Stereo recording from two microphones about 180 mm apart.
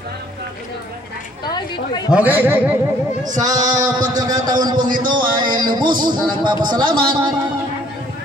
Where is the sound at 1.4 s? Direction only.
25° left (ahead or behind).